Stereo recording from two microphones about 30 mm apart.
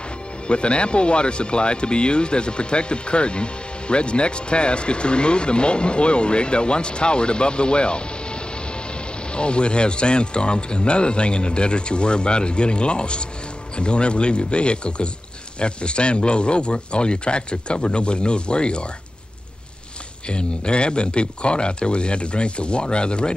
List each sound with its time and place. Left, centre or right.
0.5 s speech: left
20.2 s speech: left